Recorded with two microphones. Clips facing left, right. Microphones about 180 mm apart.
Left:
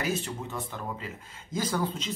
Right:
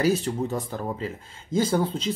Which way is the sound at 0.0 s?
35° right (ahead or behind).